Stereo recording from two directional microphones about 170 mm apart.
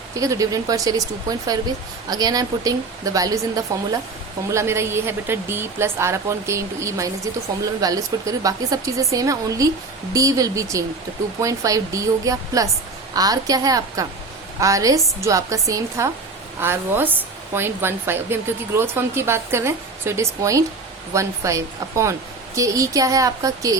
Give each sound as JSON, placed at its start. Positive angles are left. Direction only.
{"t": 0.2, "sound": "a woman's voice", "side_deg": -20}